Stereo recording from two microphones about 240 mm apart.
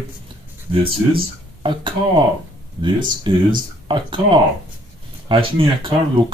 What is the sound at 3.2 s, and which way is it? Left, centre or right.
Speech, centre.